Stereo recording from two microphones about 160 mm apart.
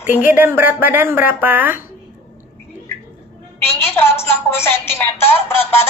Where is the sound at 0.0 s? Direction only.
10° right (ahead or behind).